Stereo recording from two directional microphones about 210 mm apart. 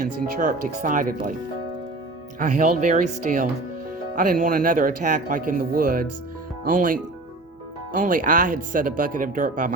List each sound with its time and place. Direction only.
0.3 s speech: 40° right (ahead or behind)
2.4 s speech: 40° right (ahead or behind)